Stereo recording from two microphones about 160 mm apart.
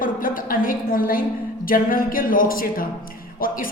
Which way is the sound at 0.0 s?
60° left (ahead or behind).